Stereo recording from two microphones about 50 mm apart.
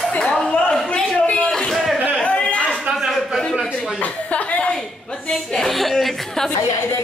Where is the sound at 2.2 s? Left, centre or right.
Left.